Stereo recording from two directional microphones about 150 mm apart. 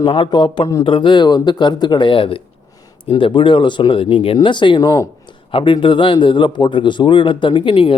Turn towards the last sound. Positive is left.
turn(degrees=35)  # may be behind; listen again after turning